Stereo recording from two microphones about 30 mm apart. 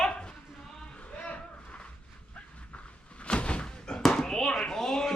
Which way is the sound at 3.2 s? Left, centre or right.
Left.